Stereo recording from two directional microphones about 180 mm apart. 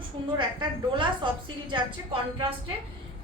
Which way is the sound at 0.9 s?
25° right (ahead or behind).